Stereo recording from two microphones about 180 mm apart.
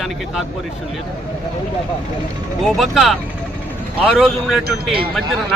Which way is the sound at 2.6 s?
Centre (ahead or behind).